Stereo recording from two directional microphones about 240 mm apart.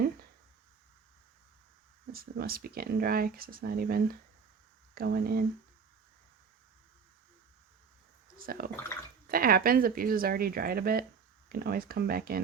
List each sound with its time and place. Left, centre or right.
2.1 s speech: right
8.4 s speech: right